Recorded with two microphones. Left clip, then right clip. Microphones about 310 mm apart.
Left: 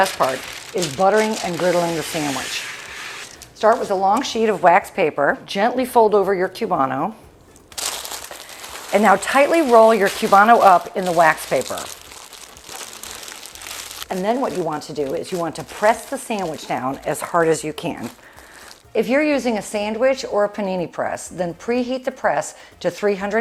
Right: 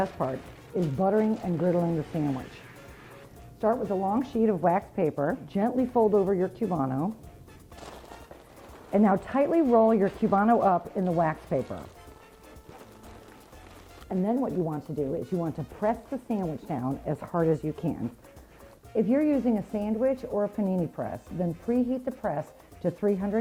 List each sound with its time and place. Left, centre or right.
0.0 s speech: centre
4.1 s a woman's voice: centre
5.9 s a woman's voice: centre
12.7 s a sound: centre
13.7 s crumpling: centre
14.7 s a woman's voice: centre
18.9 s a woman's voice: centre